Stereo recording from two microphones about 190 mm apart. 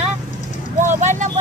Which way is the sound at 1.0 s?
40° right (ahead or behind).